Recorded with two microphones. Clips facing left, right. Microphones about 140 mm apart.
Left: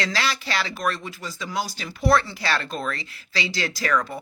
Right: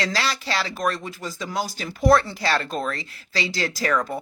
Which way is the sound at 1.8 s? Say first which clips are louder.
Right 3 dB; 40° right (ahead or behind).